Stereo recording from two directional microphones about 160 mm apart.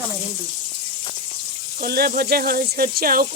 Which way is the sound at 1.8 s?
70° right (ahead or behind).